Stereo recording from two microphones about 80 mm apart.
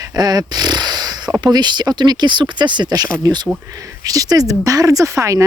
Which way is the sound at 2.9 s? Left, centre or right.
Right.